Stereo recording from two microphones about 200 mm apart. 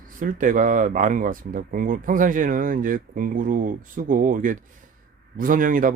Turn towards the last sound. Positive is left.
turn(degrees=-40)  # may be behind; listen again after turning